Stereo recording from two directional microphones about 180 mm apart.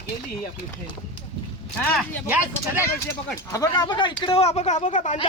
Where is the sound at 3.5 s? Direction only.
20° left (ahead or behind); by 5.2 s 45° left (ahead or behind).